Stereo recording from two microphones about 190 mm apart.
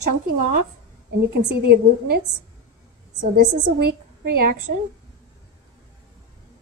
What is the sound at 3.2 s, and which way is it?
Speech, 40° right (ahead or behind).